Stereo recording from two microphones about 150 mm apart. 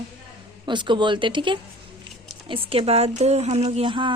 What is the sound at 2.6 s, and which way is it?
A woman's voice, 40° right (ahead or behind).